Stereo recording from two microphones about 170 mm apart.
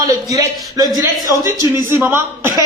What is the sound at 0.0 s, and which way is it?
A man's voice, 20° right (ahead or behind).